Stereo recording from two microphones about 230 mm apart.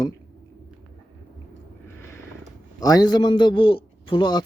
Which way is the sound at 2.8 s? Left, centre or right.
Centre.